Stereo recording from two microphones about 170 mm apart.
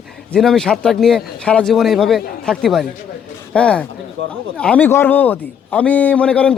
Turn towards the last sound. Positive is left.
turn(degrees=5)  # may be behind; listen again after turning